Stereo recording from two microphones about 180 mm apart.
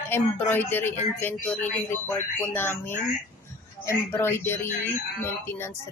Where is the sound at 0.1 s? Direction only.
10° left (ahead or behind).